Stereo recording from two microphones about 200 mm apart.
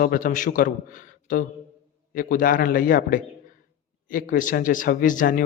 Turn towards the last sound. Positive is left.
turn(degrees=45)  # may be behind; listen again after turning